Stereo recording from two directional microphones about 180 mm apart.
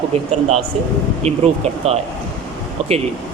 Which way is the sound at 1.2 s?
35° right (ahead or behind).